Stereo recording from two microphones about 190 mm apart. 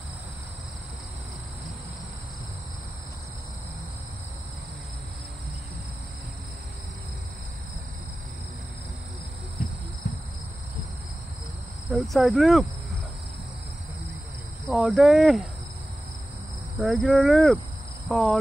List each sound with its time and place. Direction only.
9.6 s heart sounds: 50° left (ahead or behind)
11.9 s speech: centre (ahead or behind)
14.7 s speech: centre (ahead or behind)
16.7 s speech: centre (ahead or behind)